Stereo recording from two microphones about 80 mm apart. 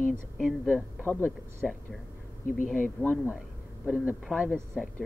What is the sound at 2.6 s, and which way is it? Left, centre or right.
Speech, left.